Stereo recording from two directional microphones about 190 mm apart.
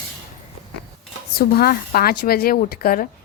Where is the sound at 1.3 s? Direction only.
55° left (ahead or behind).